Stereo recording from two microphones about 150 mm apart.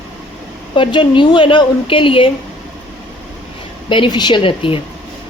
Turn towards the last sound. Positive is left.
turn(degrees=35)  # may be behind; listen again after turning